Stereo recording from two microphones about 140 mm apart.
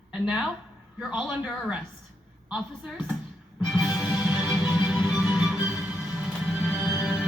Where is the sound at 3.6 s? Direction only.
Centre (ahead or behind).